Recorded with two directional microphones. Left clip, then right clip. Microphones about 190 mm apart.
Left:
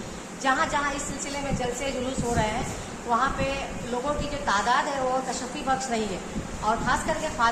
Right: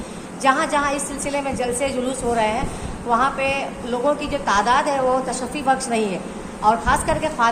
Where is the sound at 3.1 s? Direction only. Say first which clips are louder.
Right 6 dB; 45° right (ahead or behind).